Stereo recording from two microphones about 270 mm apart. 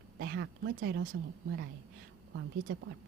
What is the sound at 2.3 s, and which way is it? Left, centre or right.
Speech, right.